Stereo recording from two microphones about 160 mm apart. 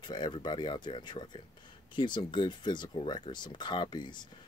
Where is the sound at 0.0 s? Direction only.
25° left (ahead or behind).